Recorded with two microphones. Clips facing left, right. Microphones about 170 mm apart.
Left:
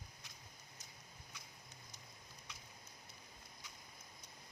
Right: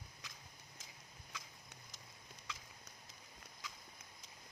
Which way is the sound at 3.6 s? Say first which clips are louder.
Right 9 dB; 90° right.